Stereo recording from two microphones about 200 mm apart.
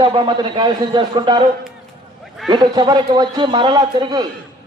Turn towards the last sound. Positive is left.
turn(degrees=-20)  # may be behind; listen again after turning